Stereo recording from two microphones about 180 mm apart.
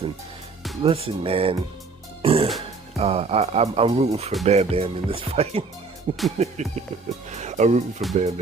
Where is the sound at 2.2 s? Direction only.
30° right (ahead or behind).